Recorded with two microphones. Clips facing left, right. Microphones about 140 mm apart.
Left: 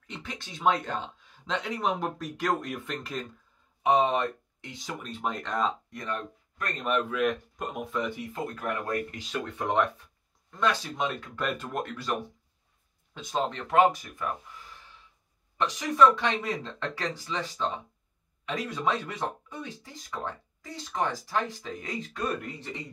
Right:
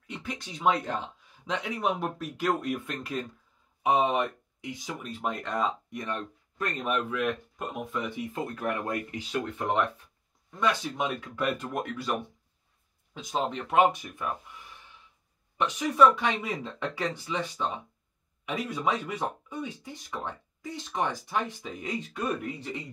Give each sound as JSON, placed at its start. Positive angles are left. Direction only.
{"t": 0.0, "sound": "speech", "side_deg": -10}
{"t": 3.8, "sound": "speech", "side_deg": -15}
{"t": 7.1, "sound": "speech", "side_deg": 0}
{"t": 8.2, "sound": "speech", "side_deg": -20}
{"t": 10.5, "sound": "speech", "side_deg": -15}
{"t": 11.2, "sound": "speech", "side_deg": -5}
{"t": 15.5, "sound": "speech", "side_deg": -10}